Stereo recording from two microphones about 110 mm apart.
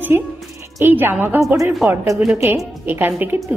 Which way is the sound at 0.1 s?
20° right (ahead or behind).